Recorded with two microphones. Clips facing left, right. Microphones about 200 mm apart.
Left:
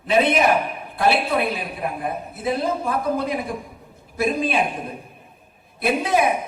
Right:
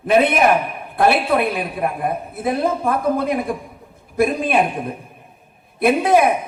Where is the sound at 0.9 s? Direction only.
55° right (ahead or behind).